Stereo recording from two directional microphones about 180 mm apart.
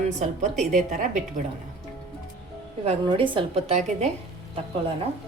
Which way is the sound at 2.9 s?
30° right (ahead or behind).